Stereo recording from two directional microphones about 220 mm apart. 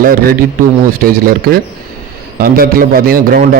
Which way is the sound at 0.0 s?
40° right (ahead or behind).